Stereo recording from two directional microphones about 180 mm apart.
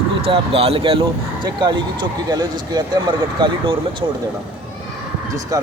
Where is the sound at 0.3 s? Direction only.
30° right (ahead or behind).